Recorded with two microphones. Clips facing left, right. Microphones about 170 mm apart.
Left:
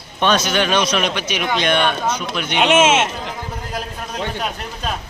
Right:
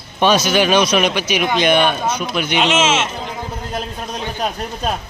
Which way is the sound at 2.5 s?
55° left (ahead or behind).